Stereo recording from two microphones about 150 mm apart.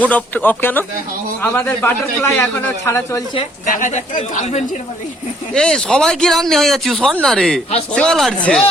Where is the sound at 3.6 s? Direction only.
60° left (ahead or behind).